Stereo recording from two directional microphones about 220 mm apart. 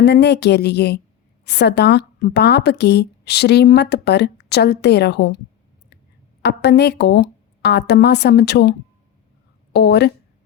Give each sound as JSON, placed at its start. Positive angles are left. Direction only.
{"t": 0.0, "sound": "speech", "side_deg": 50}
{"t": 6.4, "sound": "speech", "side_deg": 50}
{"t": 9.7, "sound": "speech", "side_deg": 50}